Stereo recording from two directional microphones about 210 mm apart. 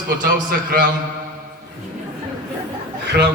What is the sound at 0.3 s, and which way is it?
Speech, 40° right (ahead or behind).